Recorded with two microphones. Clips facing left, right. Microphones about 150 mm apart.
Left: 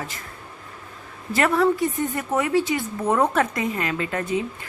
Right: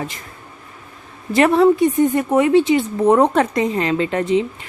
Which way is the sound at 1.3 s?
20° right (ahead or behind).